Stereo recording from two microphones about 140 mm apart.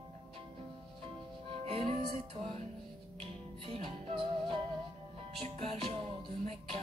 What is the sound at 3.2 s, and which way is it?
Music, 45° right (ahead or behind).